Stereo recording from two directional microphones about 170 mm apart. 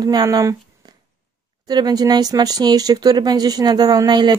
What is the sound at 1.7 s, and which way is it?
Speech, 25° right (ahead or behind).